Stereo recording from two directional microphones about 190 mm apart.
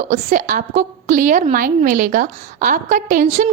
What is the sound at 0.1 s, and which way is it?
A woman's voice, 45° right (ahead or behind).